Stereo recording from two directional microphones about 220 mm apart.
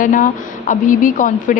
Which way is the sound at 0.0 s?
35° left (ahead or behind).